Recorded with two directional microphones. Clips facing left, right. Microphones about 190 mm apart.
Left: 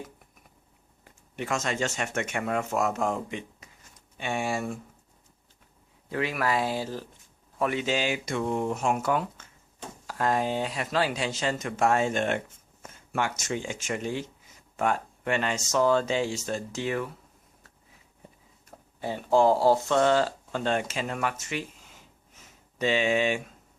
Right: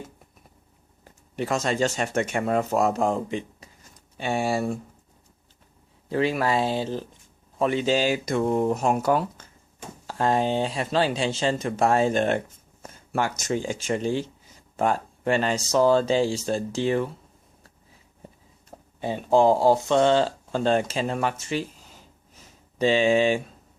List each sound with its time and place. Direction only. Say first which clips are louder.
1.0 s speech: right 5 dB; 35° right (ahead or behind)
6.1 s speech: right 5 dB; 30° right (ahead or behind)
18.9 s speech: right 3 dB; 20° right (ahead or behind)